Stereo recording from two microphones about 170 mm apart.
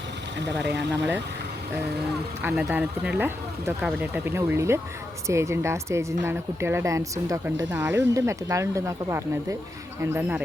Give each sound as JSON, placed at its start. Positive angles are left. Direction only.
{"t": 0.6, "sound": "speech", "side_deg": -90}
{"t": 2.4, "sound": "speech", "side_deg": -5}